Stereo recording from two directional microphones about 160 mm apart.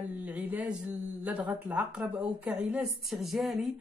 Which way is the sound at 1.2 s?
10° right (ahead or behind).